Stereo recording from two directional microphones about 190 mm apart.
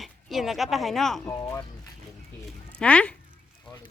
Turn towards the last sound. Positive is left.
turn(degrees=5)  # may be behind; listen again after turning